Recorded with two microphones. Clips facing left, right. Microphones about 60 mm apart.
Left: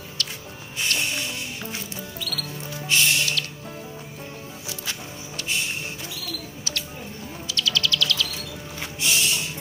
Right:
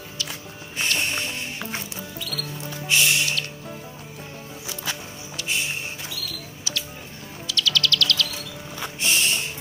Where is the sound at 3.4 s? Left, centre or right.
Left.